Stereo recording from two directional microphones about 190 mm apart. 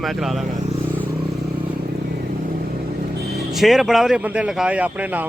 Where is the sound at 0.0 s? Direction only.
Centre (ahead or behind).